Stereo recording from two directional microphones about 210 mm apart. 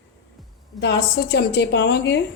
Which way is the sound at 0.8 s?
55° left (ahead or behind).